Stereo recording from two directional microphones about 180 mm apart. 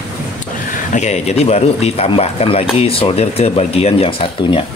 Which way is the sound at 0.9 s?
40° left (ahead or behind).